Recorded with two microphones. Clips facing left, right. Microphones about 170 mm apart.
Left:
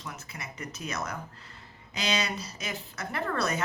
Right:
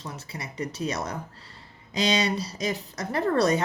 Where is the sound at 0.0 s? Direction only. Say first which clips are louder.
Right 4 dB; 30° right (ahead or behind).